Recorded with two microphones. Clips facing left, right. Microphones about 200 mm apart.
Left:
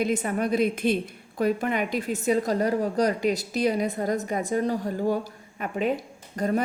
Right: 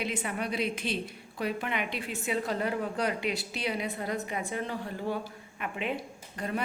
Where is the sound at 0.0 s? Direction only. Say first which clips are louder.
Left 8 dB; 45° left (ahead or behind).